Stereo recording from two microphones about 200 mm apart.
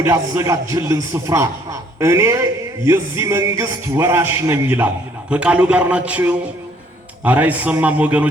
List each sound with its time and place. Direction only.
0.0 s a man's voice: 15° right (ahead or behind)